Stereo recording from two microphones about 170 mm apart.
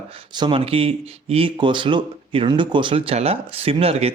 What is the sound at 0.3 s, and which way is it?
Speech, 30° right (ahead or behind).